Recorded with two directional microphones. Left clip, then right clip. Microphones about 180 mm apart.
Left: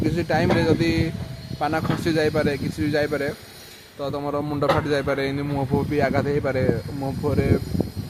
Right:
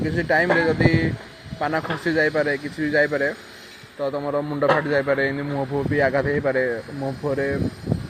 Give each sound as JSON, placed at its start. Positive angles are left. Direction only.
{"t": 0.2, "sound": "a man's voice", "side_deg": 20}